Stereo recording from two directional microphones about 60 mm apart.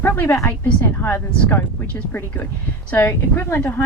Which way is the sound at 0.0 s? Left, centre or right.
Left.